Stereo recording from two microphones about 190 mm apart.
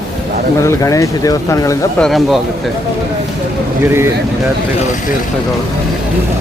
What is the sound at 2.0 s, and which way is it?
Speech, centre (ahead or behind).